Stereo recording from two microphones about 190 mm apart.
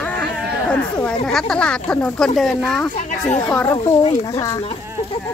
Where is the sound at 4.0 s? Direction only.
30° left (ahead or behind).